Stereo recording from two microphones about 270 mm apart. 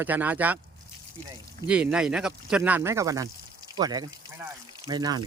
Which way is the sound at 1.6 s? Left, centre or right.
Centre.